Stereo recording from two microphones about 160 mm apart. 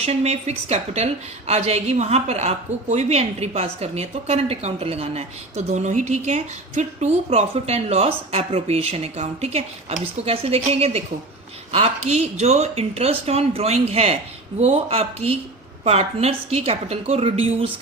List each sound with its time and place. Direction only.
0.0 s a woman's voice: 40° right (ahead or behind)